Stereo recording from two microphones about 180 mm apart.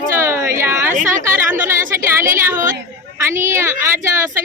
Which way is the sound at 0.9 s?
45° right (ahead or behind).